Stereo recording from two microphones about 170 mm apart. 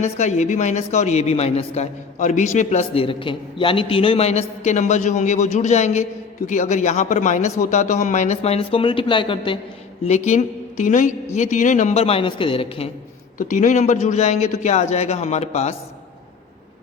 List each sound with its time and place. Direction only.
0.0 s speech: 40° left (ahead or behind)
10.0 s a woman's voice: 40° left (ahead or behind)
13.4 s speech: 45° left (ahead or behind)